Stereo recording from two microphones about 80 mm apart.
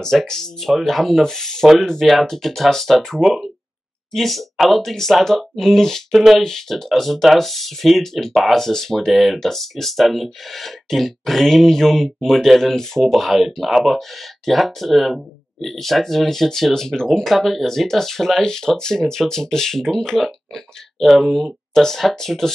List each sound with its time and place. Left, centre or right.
0.0 s speech: centre